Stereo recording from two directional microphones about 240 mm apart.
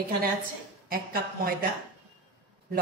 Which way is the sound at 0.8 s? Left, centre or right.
Right.